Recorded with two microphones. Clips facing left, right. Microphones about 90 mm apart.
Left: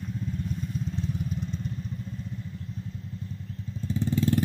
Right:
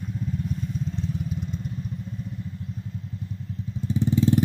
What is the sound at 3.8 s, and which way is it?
Vehicle, 15° right (ahead or behind).